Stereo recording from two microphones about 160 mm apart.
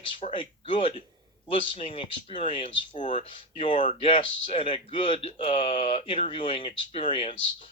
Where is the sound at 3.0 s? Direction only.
50° left (ahead or behind).